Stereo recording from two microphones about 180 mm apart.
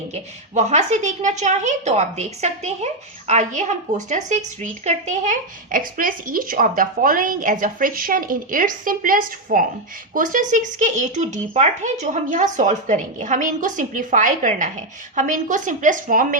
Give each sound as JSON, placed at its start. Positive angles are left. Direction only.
{"t": 0.1, "sound": "a woman's voice", "side_deg": -40}